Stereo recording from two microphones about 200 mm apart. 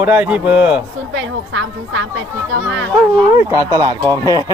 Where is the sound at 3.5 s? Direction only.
15° right (ahead or behind).